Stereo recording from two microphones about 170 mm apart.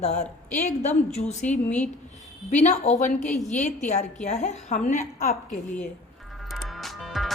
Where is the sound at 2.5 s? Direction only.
45° left (ahead or behind).